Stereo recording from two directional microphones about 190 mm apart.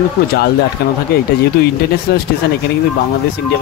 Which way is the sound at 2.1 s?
55° left (ahead or behind).